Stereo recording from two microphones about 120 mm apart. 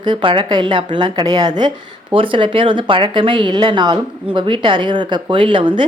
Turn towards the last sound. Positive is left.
turn(degrees=-45)  # may be behind; listen again after turning